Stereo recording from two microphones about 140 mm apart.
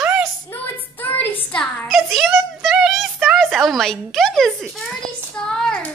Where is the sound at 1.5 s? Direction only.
5° left (ahead or behind).